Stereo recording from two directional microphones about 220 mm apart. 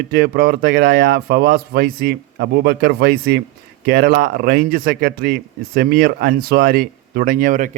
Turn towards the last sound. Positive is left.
turn(degrees=-40)  # may be behind; listen again after turning